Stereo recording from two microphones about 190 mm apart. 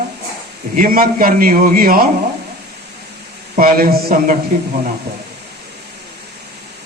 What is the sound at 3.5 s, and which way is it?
Speech, 50° right (ahead or behind).